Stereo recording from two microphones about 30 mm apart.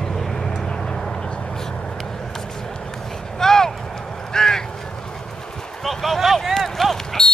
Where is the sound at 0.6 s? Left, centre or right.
Left.